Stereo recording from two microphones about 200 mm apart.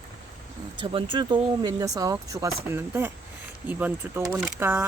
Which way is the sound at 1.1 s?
25° right (ahead or behind).